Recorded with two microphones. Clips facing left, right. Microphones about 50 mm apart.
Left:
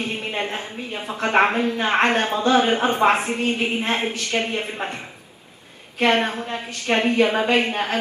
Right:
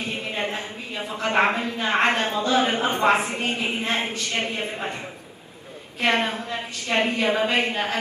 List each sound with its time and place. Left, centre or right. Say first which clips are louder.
0.0 s a woman's voice: left 2 dB; left
3.3 s a woman's voice: left 4 dB; right
3.8 s a woman's voice: left 2 dB; left
5.9 s a woman's voice: left 3 dB; left